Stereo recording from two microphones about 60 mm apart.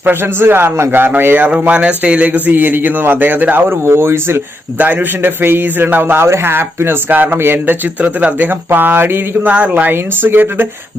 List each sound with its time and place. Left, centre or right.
0.0 s a man's voice: right
1.5 s a man's voice: right
4.8 s a man's voice: right